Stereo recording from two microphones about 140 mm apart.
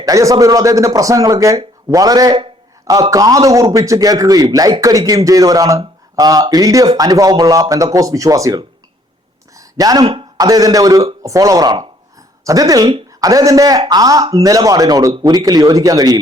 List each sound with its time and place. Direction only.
0.0 s a man's voice: 25° right (ahead or behind)
9.6 s a sound: 25° right (ahead or behind)
10.3 s a man's voice: 25° right (ahead or behind)